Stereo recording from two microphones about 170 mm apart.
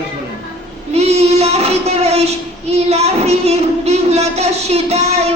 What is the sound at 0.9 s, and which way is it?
Child singing, 40° right (ahead or behind).